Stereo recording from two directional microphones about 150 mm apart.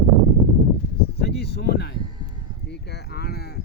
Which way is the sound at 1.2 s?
90° left.